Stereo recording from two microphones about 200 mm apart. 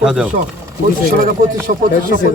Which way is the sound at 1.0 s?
45° right (ahead or behind).